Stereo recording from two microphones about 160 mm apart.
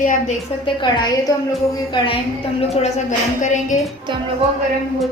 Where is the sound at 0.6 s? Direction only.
30° left (ahead or behind).